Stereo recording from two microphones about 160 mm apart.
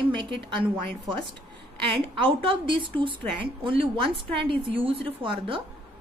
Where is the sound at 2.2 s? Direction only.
35° right (ahead or behind).